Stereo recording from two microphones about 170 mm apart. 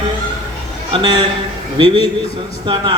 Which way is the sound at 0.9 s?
25° right (ahead or behind).